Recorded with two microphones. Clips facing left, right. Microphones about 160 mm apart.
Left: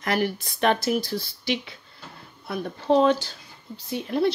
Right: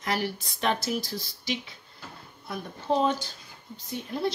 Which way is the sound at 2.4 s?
80° left.